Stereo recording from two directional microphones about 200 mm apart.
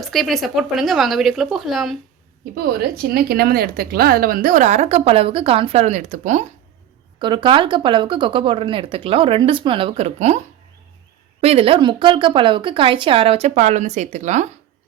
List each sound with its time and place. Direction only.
0.0 s speech: centre (ahead or behind)
2.6 s speech: 50° right (ahead or behind)
7.2 s speech: 25° right (ahead or behind)